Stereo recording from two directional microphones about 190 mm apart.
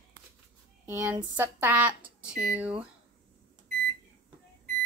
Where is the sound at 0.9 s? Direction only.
15° right (ahead or behind).